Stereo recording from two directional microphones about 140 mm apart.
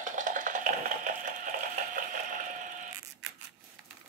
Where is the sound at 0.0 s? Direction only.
65° right (ahead or behind).